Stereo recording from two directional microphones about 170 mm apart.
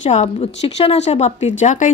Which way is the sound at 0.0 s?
40° left (ahead or behind).